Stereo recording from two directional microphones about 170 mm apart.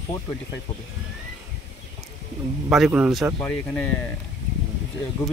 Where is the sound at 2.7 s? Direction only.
5° right (ahead or behind).